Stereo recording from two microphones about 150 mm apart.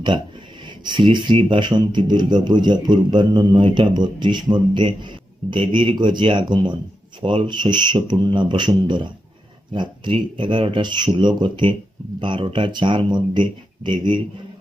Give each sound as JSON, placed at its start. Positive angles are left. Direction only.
{"t": 0.9, "sound": "speech", "side_deg": -30}